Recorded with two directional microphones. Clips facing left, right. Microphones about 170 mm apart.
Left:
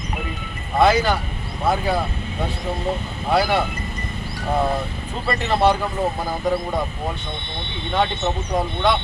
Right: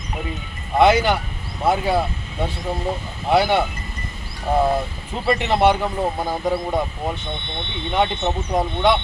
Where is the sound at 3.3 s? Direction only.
25° right (ahead or behind).